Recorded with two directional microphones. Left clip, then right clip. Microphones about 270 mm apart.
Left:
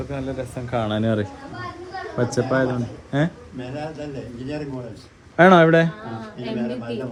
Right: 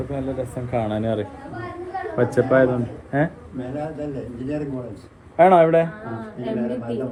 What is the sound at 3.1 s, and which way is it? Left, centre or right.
A man's voice, left.